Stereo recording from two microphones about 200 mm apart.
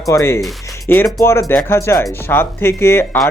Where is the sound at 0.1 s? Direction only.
15° left (ahead or behind).